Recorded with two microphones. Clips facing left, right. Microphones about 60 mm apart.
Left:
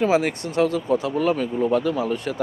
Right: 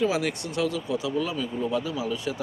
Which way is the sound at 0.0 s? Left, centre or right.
Left.